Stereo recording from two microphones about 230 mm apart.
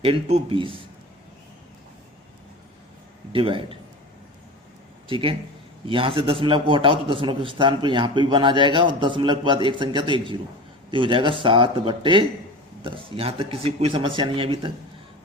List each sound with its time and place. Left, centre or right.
0.0 s a man's voice: right
3.3 s a man's voice: right
5.0 s a man's voice: right